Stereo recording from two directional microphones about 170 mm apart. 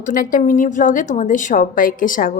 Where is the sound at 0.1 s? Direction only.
50° left (ahead or behind).